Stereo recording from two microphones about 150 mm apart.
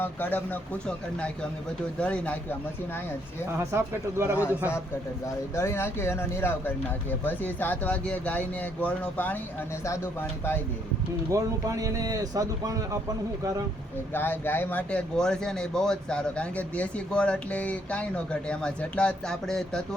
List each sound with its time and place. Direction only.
0.0 s speech: 10° left (ahead or behind)
3.6 s speech: 20° right (ahead or behind)
5.5 s speech: 15° left (ahead or behind)
11.3 s speech: 20° right (ahead or behind)
14.1 s speech: 15° left (ahead or behind)